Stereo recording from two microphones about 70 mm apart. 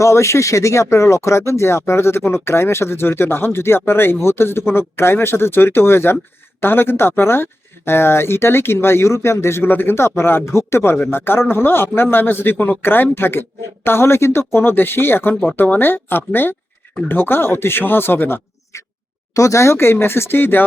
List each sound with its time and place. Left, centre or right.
0.0 s speech: left
19.3 s speech: left